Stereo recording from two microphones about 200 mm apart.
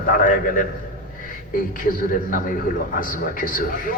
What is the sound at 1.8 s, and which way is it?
A man's voice, 45° left (ahead or behind).